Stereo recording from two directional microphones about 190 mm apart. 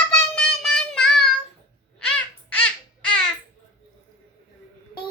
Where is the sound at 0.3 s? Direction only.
Centre (ahead or behind).